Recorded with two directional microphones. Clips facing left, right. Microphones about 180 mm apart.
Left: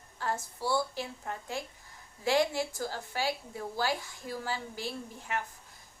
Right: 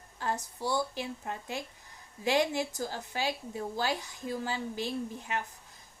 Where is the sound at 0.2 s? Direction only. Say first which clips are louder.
Even; 20° right (ahead or behind).